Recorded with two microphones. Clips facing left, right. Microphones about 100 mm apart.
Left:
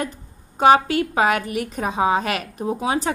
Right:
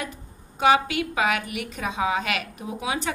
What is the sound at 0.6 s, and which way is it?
A woman's voice, 40° left (ahead or behind).